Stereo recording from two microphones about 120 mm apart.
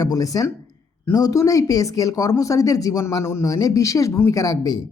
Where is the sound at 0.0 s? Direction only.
30° left (ahead or behind).